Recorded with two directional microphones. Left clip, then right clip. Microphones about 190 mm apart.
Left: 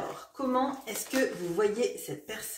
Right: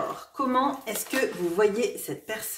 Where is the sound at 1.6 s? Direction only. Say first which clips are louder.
Right 4 dB; 40° right (ahead or behind).